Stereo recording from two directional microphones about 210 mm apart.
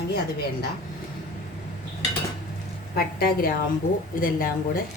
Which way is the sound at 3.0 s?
45° left (ahead or behind).